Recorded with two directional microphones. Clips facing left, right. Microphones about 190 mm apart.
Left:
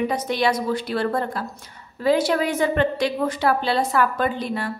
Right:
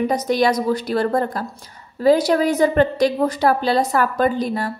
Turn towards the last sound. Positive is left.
turn(degrees=-40)  # may be behind; listen again after turning